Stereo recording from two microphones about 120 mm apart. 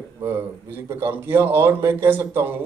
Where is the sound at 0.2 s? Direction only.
15° right (ahead or behind).